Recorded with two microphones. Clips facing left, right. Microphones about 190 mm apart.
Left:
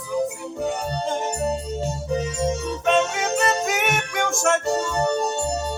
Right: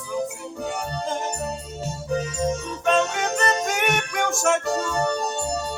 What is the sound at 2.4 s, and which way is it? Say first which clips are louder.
Music: left 1 dB; 5° left (ahead or behind).